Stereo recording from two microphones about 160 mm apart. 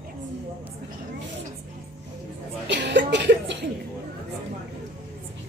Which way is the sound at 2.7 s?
90° right.